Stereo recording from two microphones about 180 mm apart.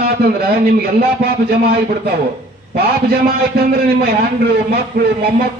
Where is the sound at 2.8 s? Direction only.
60° right (ahead or behind).